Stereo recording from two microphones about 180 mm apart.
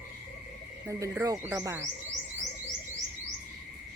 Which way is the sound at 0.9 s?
15° right (ahead or behind).